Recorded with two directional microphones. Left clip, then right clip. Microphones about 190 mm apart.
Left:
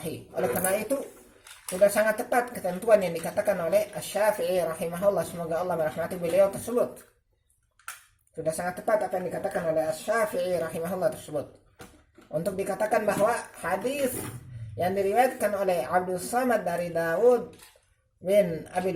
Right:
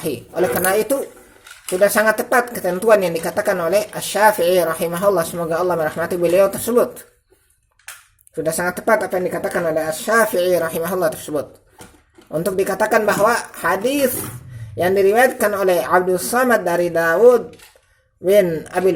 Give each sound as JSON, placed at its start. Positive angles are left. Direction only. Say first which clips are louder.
{"t": 0.0, "sound": "a woman's voice", "louder": "right 10 dB", "side_deg": -40}
{"t": 8.4, "sound": "a woman's voice", "louder": "right 9 dB", "side_deg": -45}
{"t": 14.8, "sound": "a woman's voice", "louder": "right 10 dB", "side_deg": -45}